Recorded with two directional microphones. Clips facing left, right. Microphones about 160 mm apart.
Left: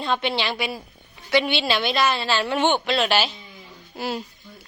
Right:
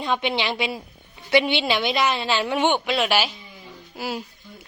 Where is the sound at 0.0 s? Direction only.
15° right (ahead or behind).